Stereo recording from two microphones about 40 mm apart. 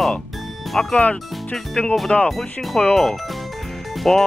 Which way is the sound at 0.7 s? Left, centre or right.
Centre.